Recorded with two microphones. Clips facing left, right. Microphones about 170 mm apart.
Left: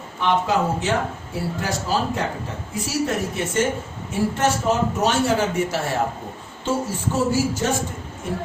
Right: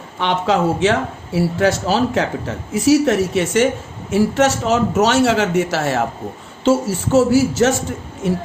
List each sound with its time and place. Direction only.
0.2 s a man's voice: 85° right